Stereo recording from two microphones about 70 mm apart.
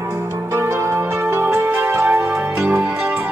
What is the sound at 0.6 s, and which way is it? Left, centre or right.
Music, right.